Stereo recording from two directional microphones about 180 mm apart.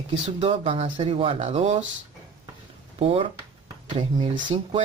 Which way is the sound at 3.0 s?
35° right (ahead or behind).